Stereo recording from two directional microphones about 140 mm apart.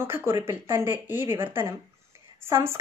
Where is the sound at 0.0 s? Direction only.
15° right (ahead or behind).